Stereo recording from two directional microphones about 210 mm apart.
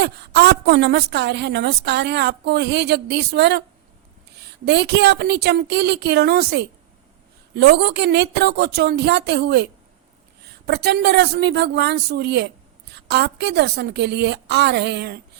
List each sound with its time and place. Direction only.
0.0 s a woman's voice: 50° right (ahead or behind)
4.6 s a woman's voice: 55° right (ahead or behind)
10.7 s a woman's voice: 50° right (ahead or behind)